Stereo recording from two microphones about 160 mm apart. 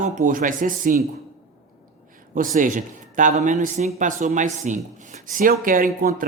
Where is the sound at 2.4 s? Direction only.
55° right (ahead or behind).